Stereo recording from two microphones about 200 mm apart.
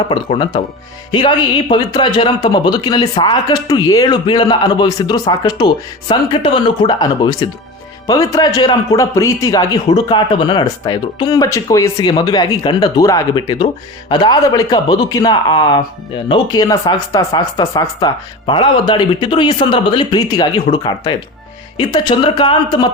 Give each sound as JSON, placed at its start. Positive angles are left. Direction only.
{"t": 0.1, "sound": "speech", "side_deg": 25}
{"t": 1.7, "sound": "speech", "side_deg": 25}